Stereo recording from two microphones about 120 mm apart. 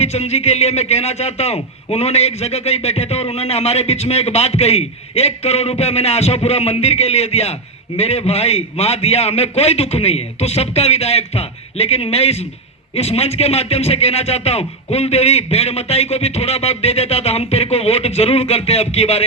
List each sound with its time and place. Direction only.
0.0 s a man's voice: 60° left (ahead or behind)